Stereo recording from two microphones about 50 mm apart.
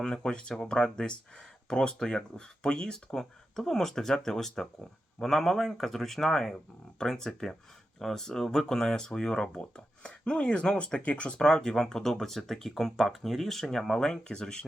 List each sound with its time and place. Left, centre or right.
0.0 s speech: centre
11.3 s speech: centre